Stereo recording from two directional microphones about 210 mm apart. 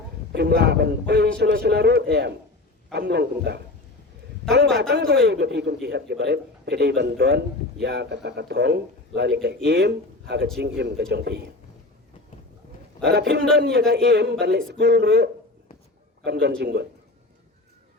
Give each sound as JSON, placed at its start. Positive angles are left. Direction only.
{"t": 0.3, "sound": "a man's voice", "side_deg": -50}
{"t": 4.8, "sound": "a man's voice", "side_deg": -55}
{"t": 13.1, "sound": "a man's voice", "side_deg": -55}